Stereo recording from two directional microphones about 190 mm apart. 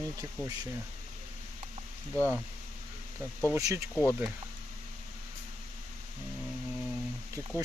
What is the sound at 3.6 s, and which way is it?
Speech, 15° right (ahead or behind).